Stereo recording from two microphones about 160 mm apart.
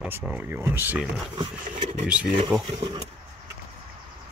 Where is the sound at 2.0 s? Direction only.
5° right (ahead or behind).